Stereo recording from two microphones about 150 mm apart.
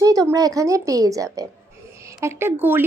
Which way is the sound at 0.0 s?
25° right (ahead or behind).